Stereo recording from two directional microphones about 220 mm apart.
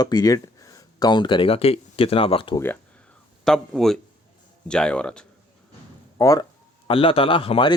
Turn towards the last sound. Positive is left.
turn(degrees=25)  # may be behind; listen again after turning